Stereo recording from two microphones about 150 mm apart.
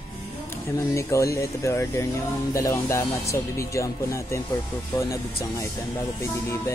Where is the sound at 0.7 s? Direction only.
20° left (ahead or behind).